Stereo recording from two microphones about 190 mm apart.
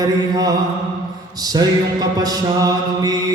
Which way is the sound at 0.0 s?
20° right (ahead or behind).